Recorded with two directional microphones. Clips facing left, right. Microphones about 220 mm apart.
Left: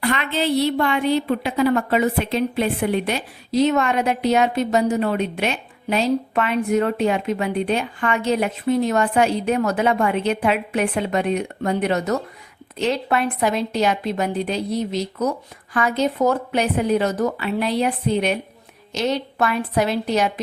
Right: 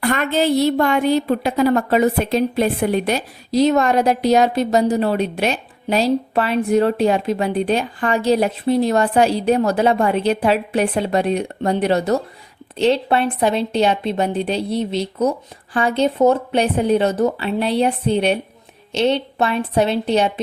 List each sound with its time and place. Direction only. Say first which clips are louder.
0.0 s a woman's voice: right 4 dB; 45° right (ahead or behind); by 20.4 s 30° right (ahead or behind)